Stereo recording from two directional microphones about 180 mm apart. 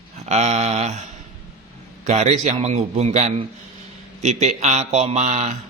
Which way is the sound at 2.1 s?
40° right (ahead or behind).